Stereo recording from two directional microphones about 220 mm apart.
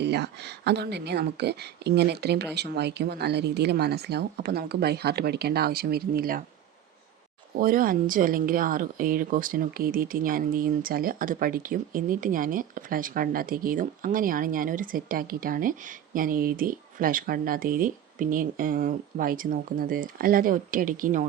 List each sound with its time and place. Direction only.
0.0 s speech: 50° right (ahead or behind)
7.5 s speech: 40° right (ahead or behind)